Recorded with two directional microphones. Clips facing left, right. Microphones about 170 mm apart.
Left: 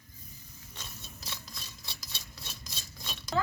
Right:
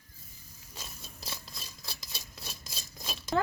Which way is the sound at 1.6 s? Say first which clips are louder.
Right 2 dB; 5° right (ahead or behind).